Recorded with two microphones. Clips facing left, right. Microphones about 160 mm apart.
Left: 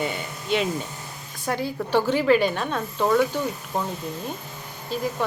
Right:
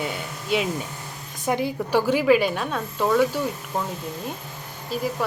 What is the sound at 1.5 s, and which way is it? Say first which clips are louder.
Speech: right 2 dB; 15° right (ahead or behind).